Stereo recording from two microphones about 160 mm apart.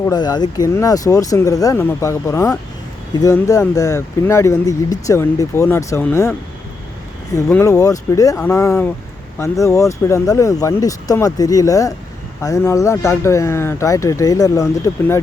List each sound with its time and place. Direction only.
0.0 s speech: 25° left (ahead or behind)
7.3 s speech: 20° left (ahead or behind)